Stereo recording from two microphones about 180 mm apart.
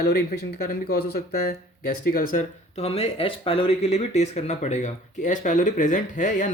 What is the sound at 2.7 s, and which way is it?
Speech, 35° left (ahead or behind).